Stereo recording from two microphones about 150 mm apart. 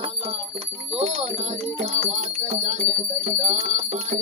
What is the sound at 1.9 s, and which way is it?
Bell, 55° right (ahead or behind).